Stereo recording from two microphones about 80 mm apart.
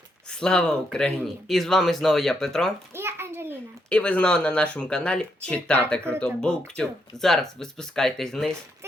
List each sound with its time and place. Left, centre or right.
0.3 s speech: centre
2.9 s a sound: right
3.8 s speech: centre